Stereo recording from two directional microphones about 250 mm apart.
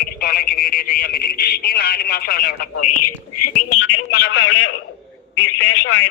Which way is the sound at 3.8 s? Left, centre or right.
Left.